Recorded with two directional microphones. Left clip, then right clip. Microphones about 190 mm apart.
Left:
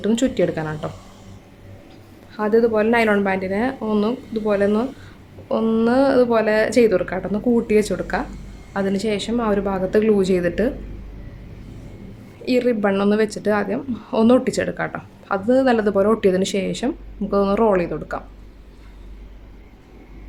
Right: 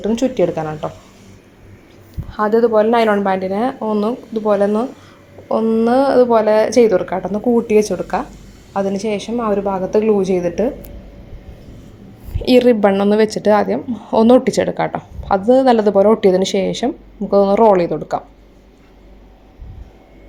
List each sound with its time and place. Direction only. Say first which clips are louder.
0.0 s a woman's voice: right 3 dB; centre (ahead or behind)
2.3 s a woman's voice: right 4 dB; 10° right (ahead or behind)
12.5 s a woman's voice: right 7 dB; 25° right (ahead or behind)